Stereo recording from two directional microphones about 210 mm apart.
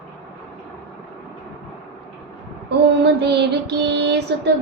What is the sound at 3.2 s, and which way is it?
Child singing, 55° right (ahead or behind).